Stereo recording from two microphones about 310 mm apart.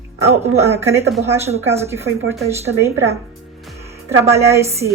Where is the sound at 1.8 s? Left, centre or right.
Centre.